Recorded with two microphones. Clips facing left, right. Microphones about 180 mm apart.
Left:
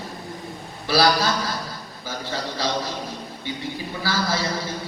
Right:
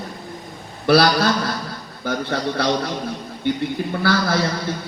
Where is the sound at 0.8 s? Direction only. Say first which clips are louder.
Right 4 dB; 60° right (ahead or behind).